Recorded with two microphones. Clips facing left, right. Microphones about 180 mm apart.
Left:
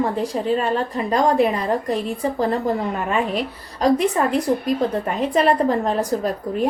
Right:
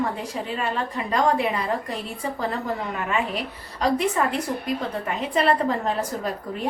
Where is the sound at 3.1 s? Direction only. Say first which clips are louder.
Left 3 dB; 40° left (ahead or behind).